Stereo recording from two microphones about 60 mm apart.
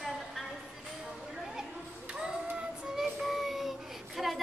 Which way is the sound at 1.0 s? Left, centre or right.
Centre.